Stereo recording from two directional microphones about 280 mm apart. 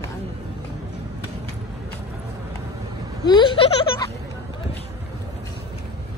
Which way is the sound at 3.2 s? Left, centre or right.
Centre.